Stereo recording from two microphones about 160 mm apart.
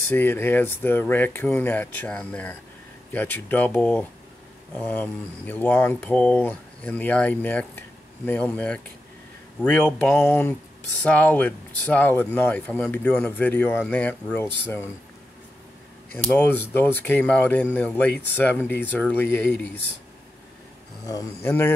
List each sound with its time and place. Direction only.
0.1 s speech: 15° left (ahead or behind)
16.1 s speech: 10° left (ahead or behind)
21.1 s speech: 15° left (ahead or behind)